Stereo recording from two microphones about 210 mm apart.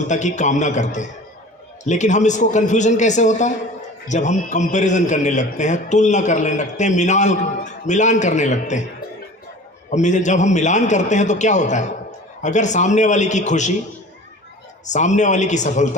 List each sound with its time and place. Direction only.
0.1 s a man's voice: 35° left (ahead or behind)
9.9 s a man's voice: 35° left (ahead or behind)
14.8 s a man's voice: 35° left (ahead or behind)